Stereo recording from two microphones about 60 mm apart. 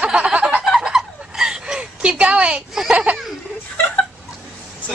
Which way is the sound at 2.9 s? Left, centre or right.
Right.